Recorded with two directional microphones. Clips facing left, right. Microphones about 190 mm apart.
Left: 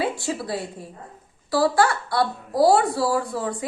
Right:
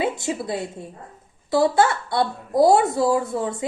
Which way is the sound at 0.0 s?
20° right (ahead or behind).